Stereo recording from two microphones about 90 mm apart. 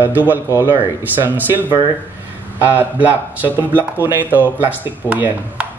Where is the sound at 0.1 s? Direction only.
20° right (ahead or behind).